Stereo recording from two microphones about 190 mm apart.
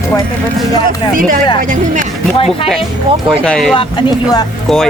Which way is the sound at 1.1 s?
45° right (ahead or behind).